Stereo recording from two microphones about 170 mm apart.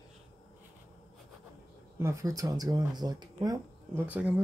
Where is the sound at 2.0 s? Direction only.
20° right (ahead or behind).